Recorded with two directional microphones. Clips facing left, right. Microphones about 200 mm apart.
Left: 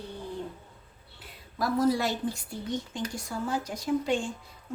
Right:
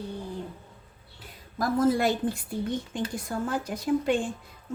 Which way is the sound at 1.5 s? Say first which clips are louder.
Right 2 dB; 50° right (ahead or behind).